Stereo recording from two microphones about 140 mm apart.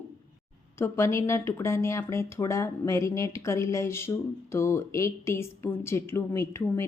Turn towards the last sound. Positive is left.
turn(degrees=15)  # may be behind; listen again after turning